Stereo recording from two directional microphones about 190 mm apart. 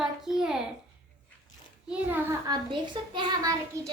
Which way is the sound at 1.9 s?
10° right (ahead or behind).